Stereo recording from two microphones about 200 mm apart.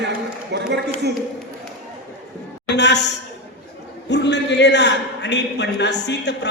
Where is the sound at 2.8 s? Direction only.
60° left (ahead or behind).